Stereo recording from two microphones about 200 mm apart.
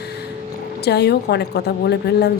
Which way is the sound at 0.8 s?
55° left (ahead or behind).